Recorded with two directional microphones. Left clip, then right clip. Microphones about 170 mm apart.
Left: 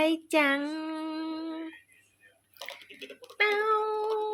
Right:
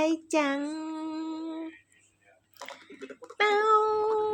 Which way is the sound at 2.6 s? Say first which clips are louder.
Left 1 dB; 45° right (ahead or behind).